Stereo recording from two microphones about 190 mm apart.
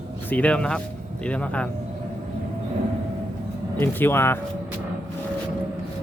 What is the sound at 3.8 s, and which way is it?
Speech, 10° left (ahead or behind).